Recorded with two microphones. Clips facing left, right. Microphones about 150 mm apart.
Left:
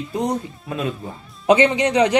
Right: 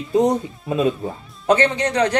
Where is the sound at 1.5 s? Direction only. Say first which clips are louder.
Left 2 dB; 10° left (ahead or behind).